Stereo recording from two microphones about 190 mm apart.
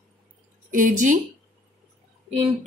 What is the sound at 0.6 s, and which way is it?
Speech, 45° right (ahead or behind).